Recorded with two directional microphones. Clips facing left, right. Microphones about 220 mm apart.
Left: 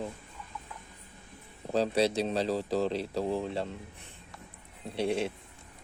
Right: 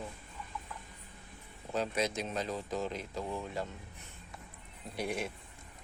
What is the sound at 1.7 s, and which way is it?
Speech, 35° left (ahead or behind).